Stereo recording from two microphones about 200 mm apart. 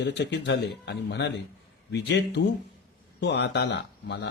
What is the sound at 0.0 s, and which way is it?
Speech, 60° left (ahead or behind).